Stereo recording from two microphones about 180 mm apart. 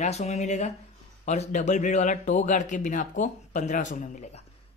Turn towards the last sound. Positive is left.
turn(degrees=40)  # may be behind; listen again after turning